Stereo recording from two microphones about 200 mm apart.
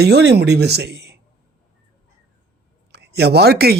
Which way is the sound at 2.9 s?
55° right (ahead or behind).